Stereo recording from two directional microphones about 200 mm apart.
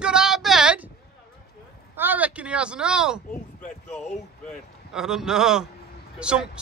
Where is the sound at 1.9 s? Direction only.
10° right (ahead or behind).